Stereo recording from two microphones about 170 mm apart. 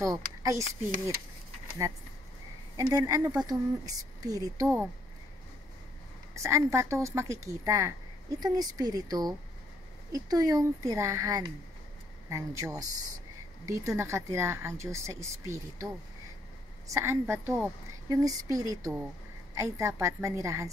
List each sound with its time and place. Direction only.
0.0 s speech: 20° right (ahead or behind)
2.8 s speech: 20° right (ahead or behind)
6.3 s speech: 15° right (ahead or behind)